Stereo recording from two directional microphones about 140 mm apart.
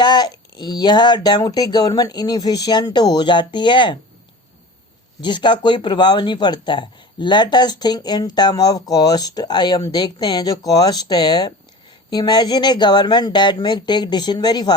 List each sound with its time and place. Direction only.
0.0 s speech: 30° left (ahead or behind)
5.2 s speech: 35° left (ahead or behind)